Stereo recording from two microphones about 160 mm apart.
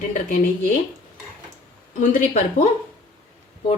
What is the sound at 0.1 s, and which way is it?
Speech, 55° left (ahead or behind).